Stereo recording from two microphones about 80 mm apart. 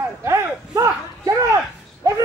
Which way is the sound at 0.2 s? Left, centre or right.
Right.